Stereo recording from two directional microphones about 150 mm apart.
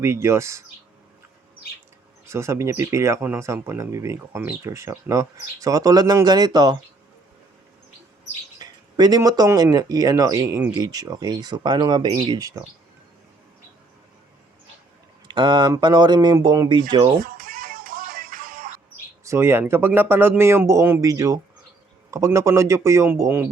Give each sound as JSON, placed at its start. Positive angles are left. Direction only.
{"t": 0.0, "sound": "speech", "side_deg": -15}
{"t": 2.2, "sound": "speech", "side_deg": -20}
{"t": 8.5, "sound": "speech", "side_deg": -25}
{"t": 15.3, "sound": "speech", "side_deg": -30}
{"t": 17.2, "sound": "music", "side_deg": -70}
{"t": 19.2, "sound": "speech", "side_deg": -20}